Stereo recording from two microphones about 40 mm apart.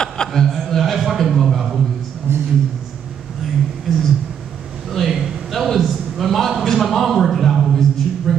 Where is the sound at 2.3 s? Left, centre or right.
Right.